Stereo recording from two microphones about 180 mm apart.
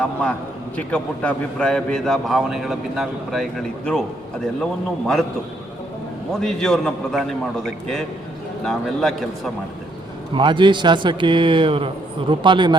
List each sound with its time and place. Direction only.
0.0 s a man's voice: 5° left (ahead or behind)
6.3 s a man's voice: 5° left (ahead or behind)
10.3 s a man's voice: 25° right (ahead or behind)